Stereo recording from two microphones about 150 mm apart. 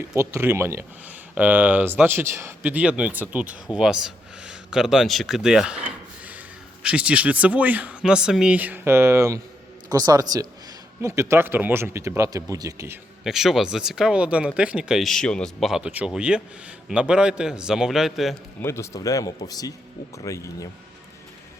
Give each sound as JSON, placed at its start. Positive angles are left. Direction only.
{"t": 0.1, "sound": "a man's voice", "side_deg": -20}
{"t": 6.8, "sound": "speech", "side_deg": -10}
{"t": 13.2, "sound": "speech", "side_deg": 0}
{"t": 18.6, "sound": "speech", "side_deg": 20}